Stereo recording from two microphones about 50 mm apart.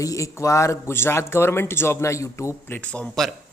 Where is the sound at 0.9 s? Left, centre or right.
Left.